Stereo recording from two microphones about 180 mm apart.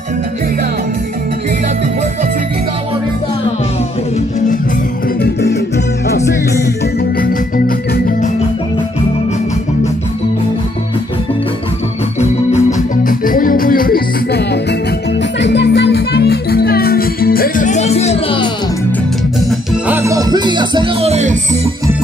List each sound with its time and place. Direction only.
5.2 s music: 70° left (ahead or behind)
7.2 s music: 50° left (ahead or behind)
12.2 s music: 40° left (ahead or behind); by 14.6 s 60° left (ahead or behind)
15.4 s music: 75° left (ahead or behind); by 18.5 s 30° left (ahead or behind)
19.7 s music: 10° right (ahead or behind); by 21.4 s 40° right (ahead or behind)